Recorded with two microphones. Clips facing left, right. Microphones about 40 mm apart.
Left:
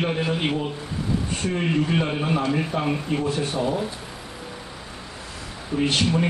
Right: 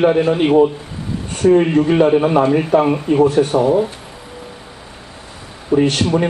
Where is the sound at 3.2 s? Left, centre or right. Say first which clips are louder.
Right 11 dB; right.